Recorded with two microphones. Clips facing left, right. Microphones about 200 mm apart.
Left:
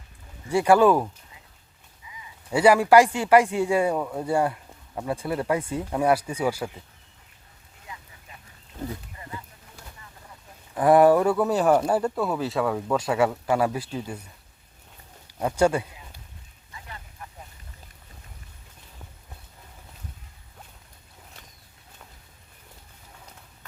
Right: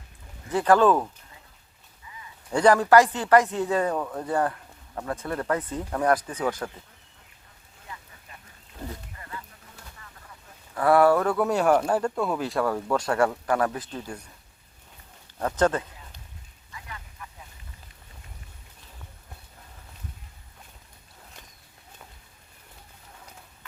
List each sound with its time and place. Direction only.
0.4 s speech: 10° left (ahead or behind)
10.8 s speech: 15° left (ahead or behind)
11.3 s speech: 5° left (ahead or behind)
15.4 s speech: 10° left (ahead or behind)
16.7 s vehicle: 30° left (ahead or behind)